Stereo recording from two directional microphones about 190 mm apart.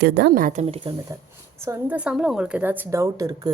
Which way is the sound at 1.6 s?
10° right (ahead or behind).